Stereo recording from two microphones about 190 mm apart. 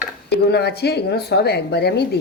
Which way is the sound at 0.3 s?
60° left (ahead or behind).